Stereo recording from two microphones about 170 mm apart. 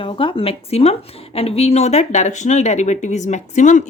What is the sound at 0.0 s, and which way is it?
Speech, 30° left (ahead or behind).